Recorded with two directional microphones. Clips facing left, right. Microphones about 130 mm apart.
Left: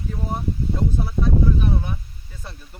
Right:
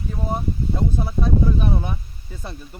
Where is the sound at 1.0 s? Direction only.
20° right (ahead or behind).